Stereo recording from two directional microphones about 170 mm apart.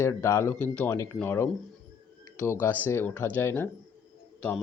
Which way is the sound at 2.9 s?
15° left (ahead or behind).